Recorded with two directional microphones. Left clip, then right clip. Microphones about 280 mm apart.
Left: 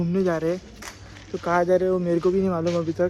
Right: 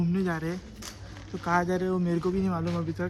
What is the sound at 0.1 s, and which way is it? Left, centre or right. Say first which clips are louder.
Speech: left 8 dB; centre.